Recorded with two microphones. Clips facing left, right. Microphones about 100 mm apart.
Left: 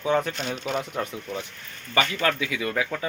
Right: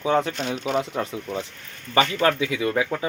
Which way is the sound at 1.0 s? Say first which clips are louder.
Right 3 dB; 25° right (ahead or behind).